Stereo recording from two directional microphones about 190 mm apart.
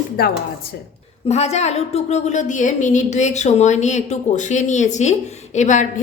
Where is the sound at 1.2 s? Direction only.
35° left (ahead or behind).